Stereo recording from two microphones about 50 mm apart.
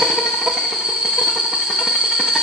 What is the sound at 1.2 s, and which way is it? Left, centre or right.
Train, centre.